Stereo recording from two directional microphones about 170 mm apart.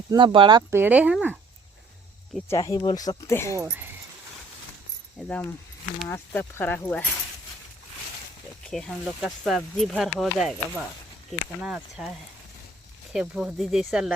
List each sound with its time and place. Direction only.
0.1 s speech: 30° right (ahead or behind)
0.7 s speech: 10° right (ahead or behind)
2.5 s speech: 20° left (ahead or behind)
3.6 s speech: 10° right (ahead or behind)
5.1 s speech: 10° left (ahead or behind)
8.6 s speech: 5° left (ahead or behind)
13.1 s speech: 5° right (ahead or behind)